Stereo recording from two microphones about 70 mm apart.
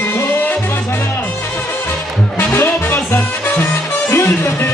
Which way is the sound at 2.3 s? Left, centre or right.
Left.